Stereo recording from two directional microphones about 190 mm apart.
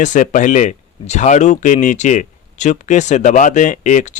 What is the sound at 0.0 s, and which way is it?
Speech, 40° left (ahead or behind).